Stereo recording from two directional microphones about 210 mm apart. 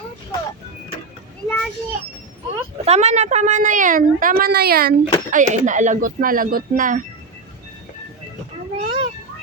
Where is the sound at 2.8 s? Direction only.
30° right (ahead or behind); by 4.9 s 45° right (ahead or behind).